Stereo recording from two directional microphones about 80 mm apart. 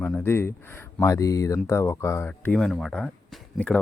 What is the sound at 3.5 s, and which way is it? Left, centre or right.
Speech, centre.